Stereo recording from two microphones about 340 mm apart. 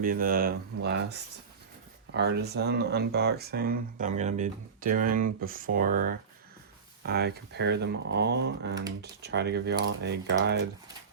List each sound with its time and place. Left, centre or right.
0.0 s speech: right
2.1 s speech: right